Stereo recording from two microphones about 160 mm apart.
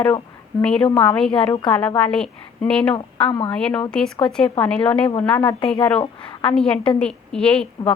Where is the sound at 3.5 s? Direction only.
10° left (ahead or behind).